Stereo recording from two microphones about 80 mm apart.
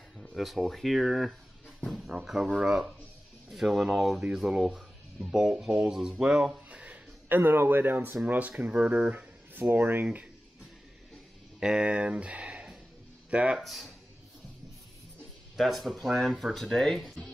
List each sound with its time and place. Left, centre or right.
0.4 s speech: centre
6.7 s a sound: centre
8.3 s speech: centre
11.6 s speech: centre
13.6 s speech: centre
15.5 s speech: centre